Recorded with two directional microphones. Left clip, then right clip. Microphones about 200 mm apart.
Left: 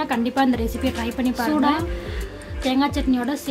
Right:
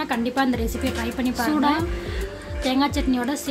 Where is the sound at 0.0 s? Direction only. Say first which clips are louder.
Left 2 dB; 5° left (ahead or behind).